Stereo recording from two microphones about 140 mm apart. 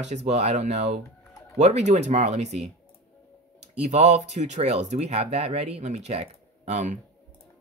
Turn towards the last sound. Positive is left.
turn(degrees=-55)  # may be behind; listen again after turning